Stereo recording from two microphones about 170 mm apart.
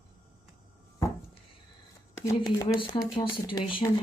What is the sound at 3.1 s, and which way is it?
Speech, 25° left (ahead or behind).